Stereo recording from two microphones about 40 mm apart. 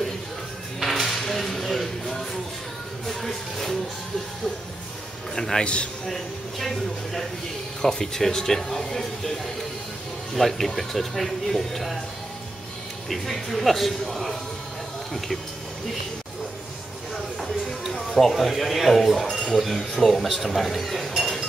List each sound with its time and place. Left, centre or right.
0.8 s a sound: centre
3.1 s music: centre
5.3 s a man's voice: centre
5.6 s a man's voice: left
6.0 s speech: centre
10.3 s speech: centre
13.1 s speech: centre
17.1 s a sound: centre
17.9 s speech: centre